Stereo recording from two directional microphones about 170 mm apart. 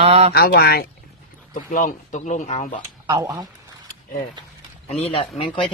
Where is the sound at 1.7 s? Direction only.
50° left (ahead or behind).